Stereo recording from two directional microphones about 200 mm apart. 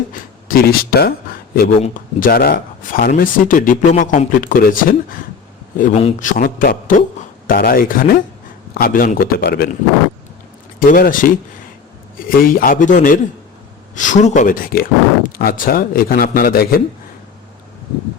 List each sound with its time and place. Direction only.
0.1 s a sound: 45° left (ahead or behind)
1.8 s speech: 40° left (ahead or behind)
10.8 s speech: 45° left (ahead or behind)